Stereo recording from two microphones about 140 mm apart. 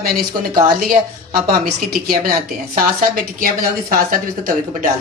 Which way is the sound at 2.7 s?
70° right (ahead or behind).